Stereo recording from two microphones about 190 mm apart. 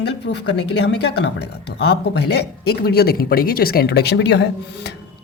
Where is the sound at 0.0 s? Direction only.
65° left (ahead or behind).